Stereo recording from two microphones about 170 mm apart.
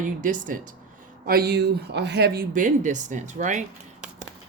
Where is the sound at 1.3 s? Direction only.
65° right (ahead or behind); by 3.6 s 45° right (ahead or behind).